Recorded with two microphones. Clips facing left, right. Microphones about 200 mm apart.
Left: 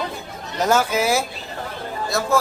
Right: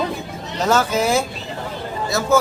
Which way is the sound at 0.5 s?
10° left (ahead or behind).